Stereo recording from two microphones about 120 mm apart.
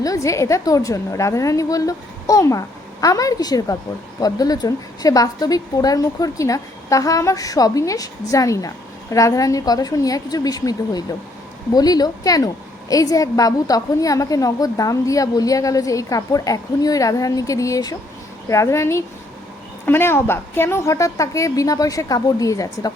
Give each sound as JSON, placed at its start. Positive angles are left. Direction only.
{"t": 0.0, "sound": "a woman's voice", "side_deg": 25}